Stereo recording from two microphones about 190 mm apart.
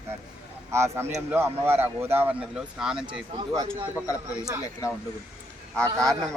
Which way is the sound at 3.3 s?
20° right (ahead or behind).